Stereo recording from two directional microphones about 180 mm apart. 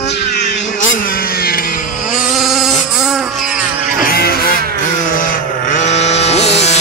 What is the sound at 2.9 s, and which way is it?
Insect, centre (ahead or behind).